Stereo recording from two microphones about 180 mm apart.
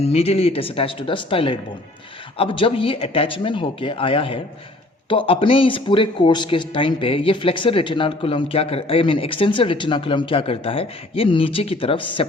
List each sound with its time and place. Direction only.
0.0 s speech: 35° left (ahead or behind)